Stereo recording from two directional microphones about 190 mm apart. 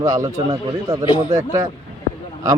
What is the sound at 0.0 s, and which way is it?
Speech, 15° right (ahead or behind).